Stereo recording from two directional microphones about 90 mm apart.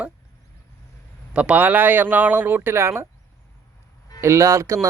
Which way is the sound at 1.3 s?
15° right (ahead or behind).